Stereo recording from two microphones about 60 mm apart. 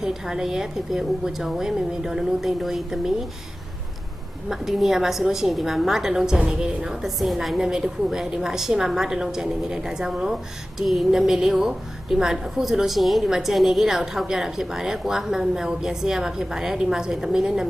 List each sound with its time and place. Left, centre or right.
0.0 s a woman's voice: centre
4.4 s a woman's voice: centre